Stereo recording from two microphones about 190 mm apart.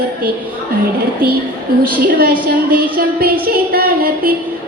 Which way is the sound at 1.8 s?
50° right (ahead or behind).